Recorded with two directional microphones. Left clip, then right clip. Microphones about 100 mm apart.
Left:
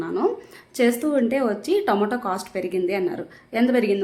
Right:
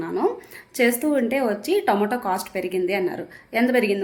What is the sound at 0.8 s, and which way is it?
A woman's voice, 30° left (ahead or behind).